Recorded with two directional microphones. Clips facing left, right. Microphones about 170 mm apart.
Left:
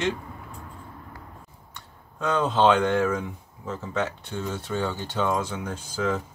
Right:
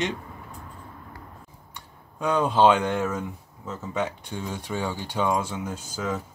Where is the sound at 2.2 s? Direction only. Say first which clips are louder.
Right 2 dB; 10° right (ahead or behind).